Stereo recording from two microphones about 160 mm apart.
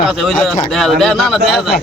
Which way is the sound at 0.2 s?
Centre (ahead or behind).